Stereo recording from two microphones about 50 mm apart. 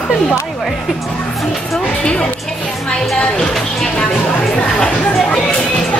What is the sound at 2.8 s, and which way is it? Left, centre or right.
Music, centre.